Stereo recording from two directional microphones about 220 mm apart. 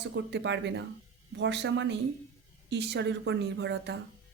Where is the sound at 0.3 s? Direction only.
50° right (ahead or behind).